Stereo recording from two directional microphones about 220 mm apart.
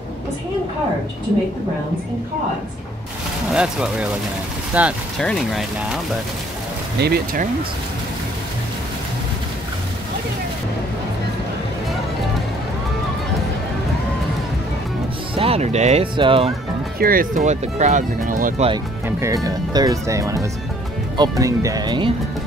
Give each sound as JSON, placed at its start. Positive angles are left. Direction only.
{"t": 3.5, "sound": "speech", "side_deg": -5}
{"t": 7.0, "sound": "speech", "side_deg": -45}
{"t": 15.3, "sound": "speech", "side_deg": -25}
{"t": 17.0, "sound": "speech", "side_deg": -40}
{"t": 19.0, "sound": "speech", "side_deg": -10}